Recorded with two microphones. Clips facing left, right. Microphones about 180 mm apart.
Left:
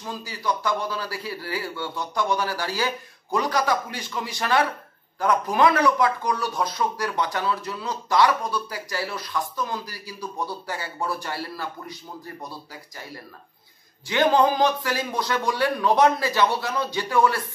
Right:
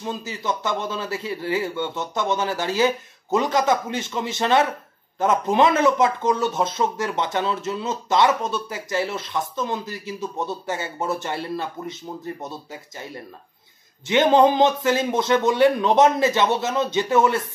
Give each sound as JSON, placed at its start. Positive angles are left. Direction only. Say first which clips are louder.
{"t": 0.0, "sound": "speech", "louder": "right 2 dB", "side_deg": -25}
{"t": 14.0, "sound": "speech", "louder": "right 4 dB", "side_deg": -20}